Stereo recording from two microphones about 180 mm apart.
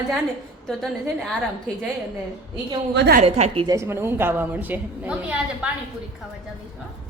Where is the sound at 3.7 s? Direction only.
15° right (ahead or behind).